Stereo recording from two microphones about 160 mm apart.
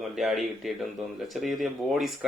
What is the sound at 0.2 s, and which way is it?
A man's voice, centre (ahead or behind).